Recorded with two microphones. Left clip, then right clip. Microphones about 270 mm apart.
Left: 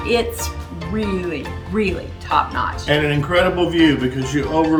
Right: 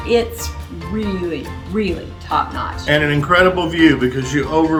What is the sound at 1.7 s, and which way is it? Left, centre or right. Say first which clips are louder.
Speech: even; centre.